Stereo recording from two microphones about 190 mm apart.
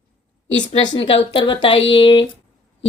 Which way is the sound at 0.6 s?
25° left (ahead or behind).